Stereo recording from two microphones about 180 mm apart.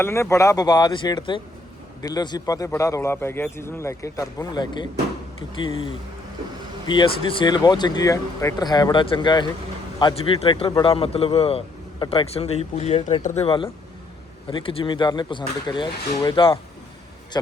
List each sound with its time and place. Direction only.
0.0 s a man's voice: 15° left (ahead or behind)